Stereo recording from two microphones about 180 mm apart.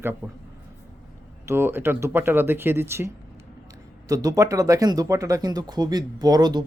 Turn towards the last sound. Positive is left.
turn(degrees=-25)  # may be behind; listen again after turning